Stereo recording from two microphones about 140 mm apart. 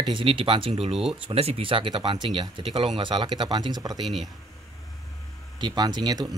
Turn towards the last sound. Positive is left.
turn(degrees=-30)  # may be behind; listen again after turning